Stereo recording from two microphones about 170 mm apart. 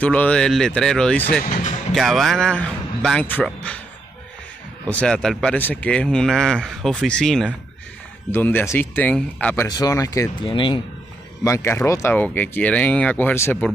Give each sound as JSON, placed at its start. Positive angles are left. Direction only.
{"t": 0.0, "sound": "speech", "side_deg": 10}
{"t": 1.4, "sound": "music", "side_deg": 45}
{"t": 2.0, "sound": "speech", "side_deg": 0}
{"t": 4.8, "sound": "speech", "side_deg": 5}
{"t": 9.7, "sound": "speech", "side_deg": 20}
{"t": 10.4, "sound": "speech", "side_deg": 30}
{"t": 11.4, "sound": "speech", "side_deg": 15}